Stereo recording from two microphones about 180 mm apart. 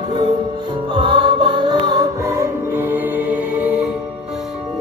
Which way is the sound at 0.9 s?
25° right (ahead or behind).